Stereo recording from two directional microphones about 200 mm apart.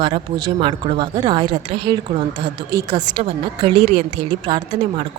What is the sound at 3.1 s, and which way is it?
Speech, 25° right (ahead or behind).